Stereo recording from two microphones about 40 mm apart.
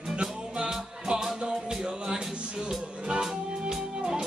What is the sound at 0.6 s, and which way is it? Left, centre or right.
Music, right.